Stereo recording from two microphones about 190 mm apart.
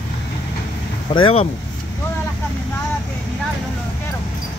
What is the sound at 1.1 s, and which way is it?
Speech, 30° left (ahead or behind).